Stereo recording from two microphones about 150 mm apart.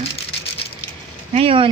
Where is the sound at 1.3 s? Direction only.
35° right (ahead or behind).